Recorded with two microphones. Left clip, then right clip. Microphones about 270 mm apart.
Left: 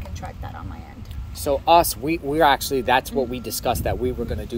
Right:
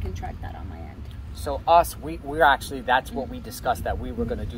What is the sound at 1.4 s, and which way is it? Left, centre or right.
Speech, left.